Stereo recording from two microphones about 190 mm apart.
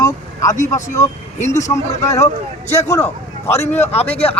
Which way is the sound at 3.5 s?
35° left (ahead or behind).